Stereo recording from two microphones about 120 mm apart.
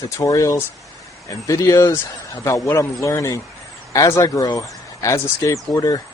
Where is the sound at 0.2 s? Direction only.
25° left (ahead or behind).